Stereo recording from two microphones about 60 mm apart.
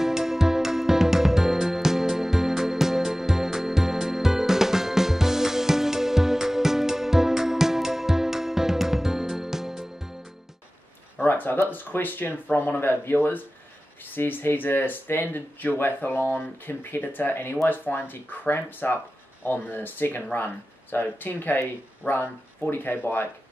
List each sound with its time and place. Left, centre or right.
0.0 s music: centre
11.1 s a sound: left
11.7 s speech: left